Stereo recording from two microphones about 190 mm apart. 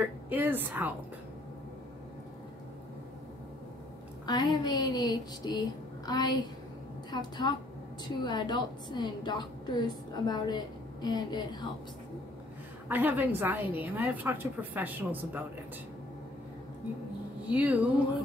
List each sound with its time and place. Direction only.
0.0 s a woman's voice: 10° right (ahead or behind)
4.3 s a woman's voice: 20° left (ahead or behind)
12.8 s a woman's voice: 10° right (ahead or behind)
17.5 s a woman's voice: 10° right (ahead or behind)